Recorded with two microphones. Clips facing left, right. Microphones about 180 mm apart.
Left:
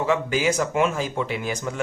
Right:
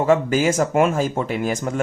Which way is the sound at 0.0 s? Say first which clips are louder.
Right 5 dB; 45° right (ahead or behind).